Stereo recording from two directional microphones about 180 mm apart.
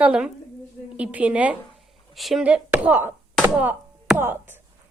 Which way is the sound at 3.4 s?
10° right (ahead or behind).